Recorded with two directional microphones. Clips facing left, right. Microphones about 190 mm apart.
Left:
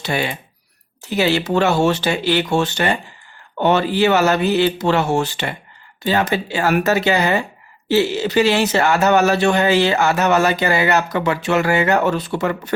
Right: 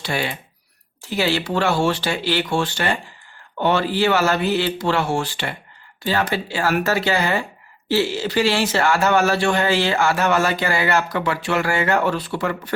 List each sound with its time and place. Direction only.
0.0 s speech: 20° left (ahead or behind)